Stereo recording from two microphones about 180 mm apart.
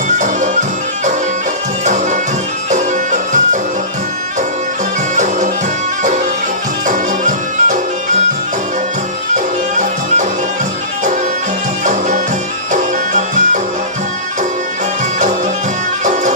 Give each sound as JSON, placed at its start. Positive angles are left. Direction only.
{"t": 0.2, "sound": "bagpipes", "side_deg": -40}
{"t": 1.8, "sound": "music", "side_deg": -45}
{"t": 5.1, "sound": "music", "side_deg": -45}
{"t": 6.8, "sound": "music", "side_deg": -45}
{"t": 11.9, "sound": "music", "side_deg": -45}